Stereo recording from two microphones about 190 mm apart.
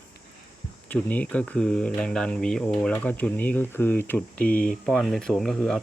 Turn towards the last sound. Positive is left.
turn(degrees=0)  # may be behind; listen again after turning